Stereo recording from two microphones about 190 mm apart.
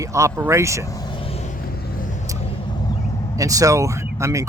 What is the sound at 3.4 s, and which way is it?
Speech, 20° right (ahead or behind).